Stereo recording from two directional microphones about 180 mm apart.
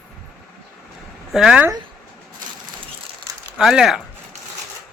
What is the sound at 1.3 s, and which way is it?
Speech, 5° right (ahead or behind).